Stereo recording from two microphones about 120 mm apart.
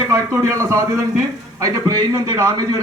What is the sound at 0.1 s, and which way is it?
A man's voice, 25° right (ahead or behind).